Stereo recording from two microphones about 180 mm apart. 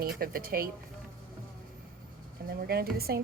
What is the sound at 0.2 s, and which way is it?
Speech, 55° right (ahead or behind).